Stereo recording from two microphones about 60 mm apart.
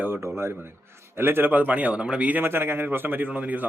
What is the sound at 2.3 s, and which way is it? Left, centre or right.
Speech, right.